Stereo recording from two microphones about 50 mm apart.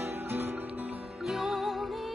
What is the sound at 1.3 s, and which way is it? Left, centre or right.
Music, centre.